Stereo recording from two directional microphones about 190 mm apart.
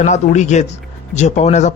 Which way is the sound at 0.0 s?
40° left (ahead or behind).